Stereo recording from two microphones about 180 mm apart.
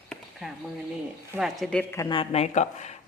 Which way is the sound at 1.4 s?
5° left (ahead or behind).